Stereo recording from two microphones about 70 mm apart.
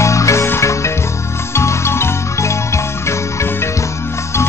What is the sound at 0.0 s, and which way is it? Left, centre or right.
Music, left.